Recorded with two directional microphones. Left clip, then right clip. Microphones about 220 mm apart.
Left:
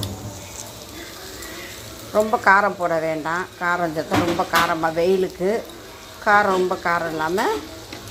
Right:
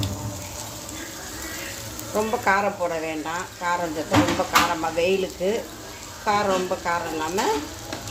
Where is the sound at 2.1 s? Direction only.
15° left (ahead or behind).